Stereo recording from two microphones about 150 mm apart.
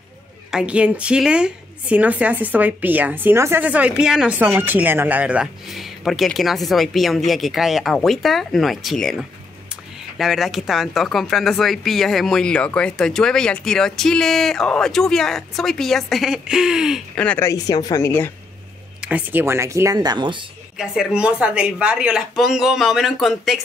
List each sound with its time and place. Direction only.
0.5 s speech: 5° right (ahead or behind)
17.2 s speech: 10° left (ahead or behind)
17.5 s a woman's voice: 25° left (ahead or behind)
18.9 s speech: 10° right (ahead or behind); by 20.4 s 30° right (ahead or behind)
20.7 s speech: 5° right (ahead or behind)